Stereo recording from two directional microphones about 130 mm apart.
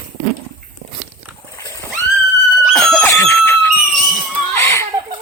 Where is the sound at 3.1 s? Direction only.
25° left (ahead or behind).